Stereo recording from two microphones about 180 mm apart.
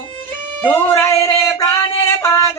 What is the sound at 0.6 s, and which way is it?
Music, 15° left (ahead or behind).